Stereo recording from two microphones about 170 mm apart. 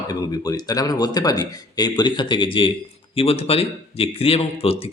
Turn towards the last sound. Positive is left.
turn(degrees=35)  # may be behind; listen again after turning